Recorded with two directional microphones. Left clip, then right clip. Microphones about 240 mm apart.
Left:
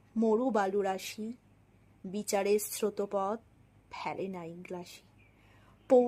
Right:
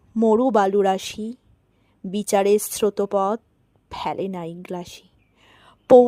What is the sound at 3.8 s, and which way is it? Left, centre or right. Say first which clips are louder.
Whispering: right 11 dB; right.